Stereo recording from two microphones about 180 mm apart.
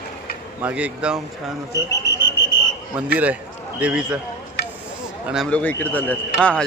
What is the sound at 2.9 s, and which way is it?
A man's voice, 10° right (ahead or behind).